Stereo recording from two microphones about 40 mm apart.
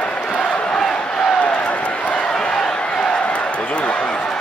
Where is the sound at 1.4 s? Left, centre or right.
Left.